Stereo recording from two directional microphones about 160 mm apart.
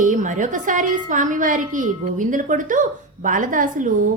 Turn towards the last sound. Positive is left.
turn(degrees=-55)  # may be behind; listen again after turning